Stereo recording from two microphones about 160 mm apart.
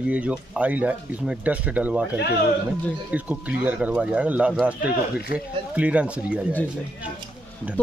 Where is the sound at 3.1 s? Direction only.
10° right (ahead or behind).